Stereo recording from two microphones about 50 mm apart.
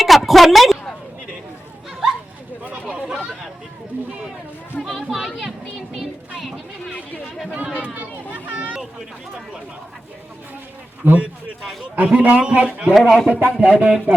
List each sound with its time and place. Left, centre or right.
0.0 s a woman's voice: centre
3.9 s a sound: right
5.1 s children playing: centre
5.9 s a sound: centre
7.8 s children playing: right
11.0 s a man's voice: right
11.9 s a man's voice: right
12.4 s speech: right
12.9 s speech: centre
13.2 s speech: right